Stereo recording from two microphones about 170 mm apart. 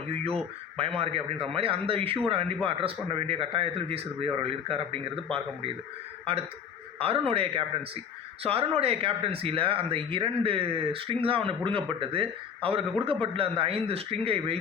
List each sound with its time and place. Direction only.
0.8 s speech: 35° right (ahead or behind)
7.0 s speech: 35° right (ahead or behind)